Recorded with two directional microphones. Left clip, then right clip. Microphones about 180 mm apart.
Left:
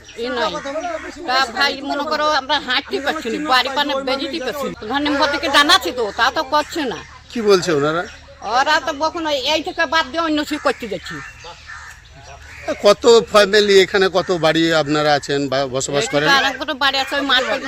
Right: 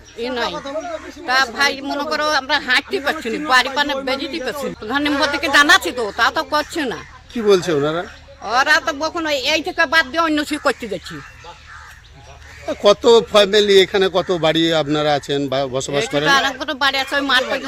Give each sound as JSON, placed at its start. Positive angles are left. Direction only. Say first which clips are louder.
{"t": 0.2, "sound": "speech", "louder": "left 1 dB", "side_deg": -10}
{"t": 0.5, "sound": "speech", "louder": "left 1 dB", "side_deg": -35}
{"t": 1.3, "sound": "a man's voice", "louder": "right 1 dB", "side_deg": -5}
{"t": 8.4, "sound": "speech", "louder": "right 1 dB", "side_deg": -10}
{"t": 12.6, "sound": "a man's voice", "louder": "left 1 dB", "side_deg": 0}